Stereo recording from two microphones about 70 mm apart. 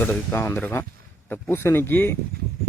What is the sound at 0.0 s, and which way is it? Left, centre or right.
Speech, left.